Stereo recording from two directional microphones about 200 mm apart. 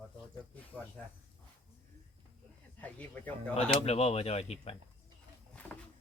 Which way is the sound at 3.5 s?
30° left (ahead or behind).